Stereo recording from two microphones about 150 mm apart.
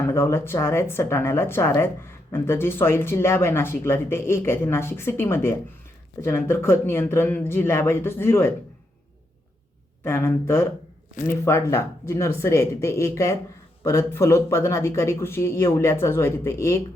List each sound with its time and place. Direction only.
0.0 s speech: 15° left (ahead or behind)
10.0 s speech: 15° left (ahead or behind)